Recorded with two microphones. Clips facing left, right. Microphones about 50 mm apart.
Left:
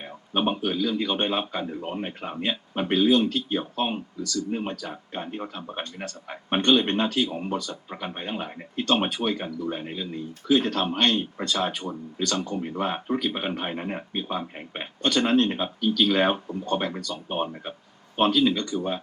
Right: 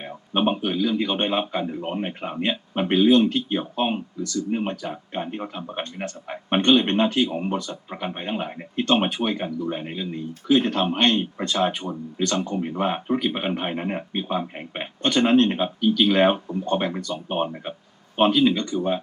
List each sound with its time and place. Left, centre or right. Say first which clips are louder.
0.0 s a man's voice: right 3 dB; centre